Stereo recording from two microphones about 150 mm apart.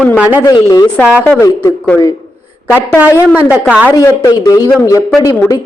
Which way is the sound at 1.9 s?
15° left (ahead or behind).